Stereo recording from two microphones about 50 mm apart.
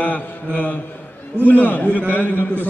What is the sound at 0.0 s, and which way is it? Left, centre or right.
Mantra, left.